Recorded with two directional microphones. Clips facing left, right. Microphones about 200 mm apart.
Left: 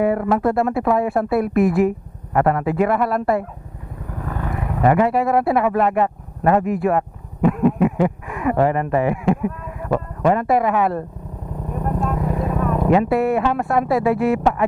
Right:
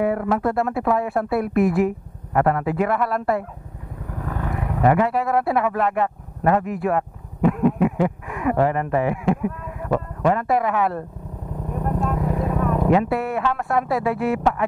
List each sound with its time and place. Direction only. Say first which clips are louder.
0.0 s speech: left 3 dB; 15° left (ahead or behind)
10.3 s speech: left 5 dB; 15° left (ahead or behind)
11.7 s vehicle: left 1 dB; 25° left (ahead or behind)
13.0 s speech: left 5 dB; 10° left (ahead or behind)